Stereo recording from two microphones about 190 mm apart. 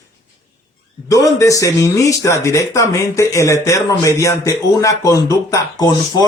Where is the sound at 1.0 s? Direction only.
15° left (ahead or behind).